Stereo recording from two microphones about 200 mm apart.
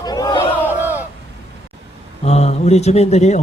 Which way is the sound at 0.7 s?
10° right (ahead or behind).